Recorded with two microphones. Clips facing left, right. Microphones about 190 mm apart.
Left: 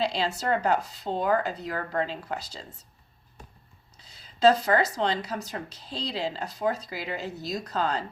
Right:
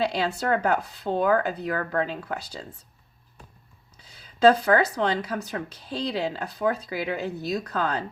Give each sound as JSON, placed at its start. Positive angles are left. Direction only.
{"t": 0.0, "sound": "speech", "side_deg": -55}
{"t": 4.0, "sound": "speech", "side_deg": -60}